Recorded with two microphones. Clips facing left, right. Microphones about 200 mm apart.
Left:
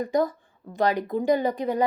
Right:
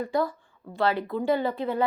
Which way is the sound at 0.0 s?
20° left (ahead or behind).